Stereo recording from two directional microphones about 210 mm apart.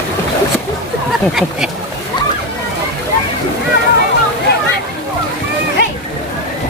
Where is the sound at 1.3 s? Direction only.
5° right (ahead or behind).